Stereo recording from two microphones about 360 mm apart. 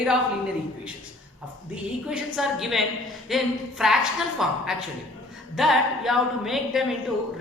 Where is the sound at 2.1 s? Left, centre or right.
Centre.